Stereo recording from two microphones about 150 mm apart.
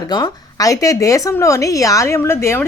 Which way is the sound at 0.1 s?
25° left (ahead or behind).